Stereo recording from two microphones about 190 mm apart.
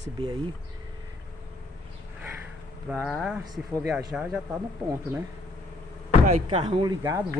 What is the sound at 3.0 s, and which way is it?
Speech, centre (ahead or behind).